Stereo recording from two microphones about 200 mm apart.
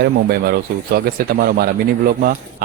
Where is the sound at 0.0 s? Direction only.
50° right (ahead or behind).